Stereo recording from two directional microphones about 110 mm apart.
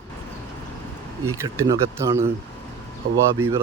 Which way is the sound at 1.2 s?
30° right (ahead or behind).